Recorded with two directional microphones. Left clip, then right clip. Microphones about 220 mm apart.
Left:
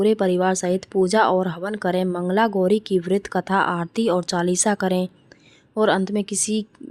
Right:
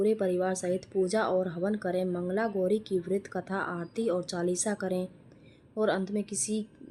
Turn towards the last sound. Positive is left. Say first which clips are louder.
# left 9 dB
turn(degrees=40)  # may be behind; listen again after turning